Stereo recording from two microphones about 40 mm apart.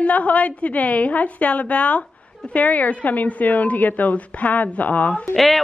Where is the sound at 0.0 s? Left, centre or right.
Left.